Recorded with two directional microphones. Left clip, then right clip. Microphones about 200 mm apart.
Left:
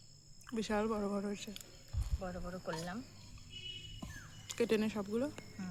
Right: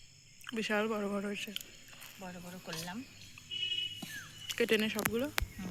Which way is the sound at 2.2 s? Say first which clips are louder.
Left 5 dB; 15° left (ahead or behind).